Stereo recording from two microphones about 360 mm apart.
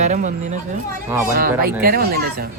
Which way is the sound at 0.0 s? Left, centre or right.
Centre.